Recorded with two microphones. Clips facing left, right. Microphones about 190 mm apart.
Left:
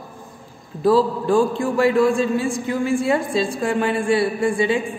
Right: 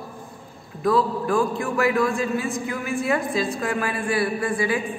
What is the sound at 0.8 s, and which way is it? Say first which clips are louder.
A man's voice: left 4 dB; 30° left (ahead or behind).